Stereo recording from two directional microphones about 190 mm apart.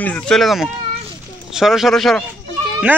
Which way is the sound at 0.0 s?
5° left (ahead or behind).